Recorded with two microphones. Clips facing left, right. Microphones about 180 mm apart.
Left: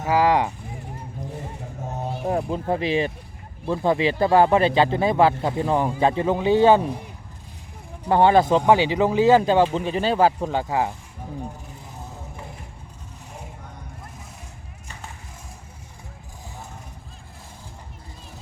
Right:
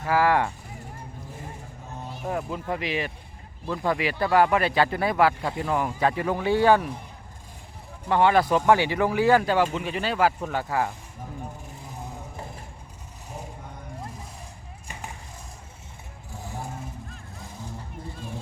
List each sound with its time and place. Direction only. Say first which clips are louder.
0.0 s speech: left 3 dB; 15° left (ahead or behind)
1.8 s a sound: left 7 dB; 50° left (ahead or behind)
2.3 s speech: left 5 dB; 30° left (ahead or behind)
8.0 s speech: left 4 dB; 30° left (ahead or behind)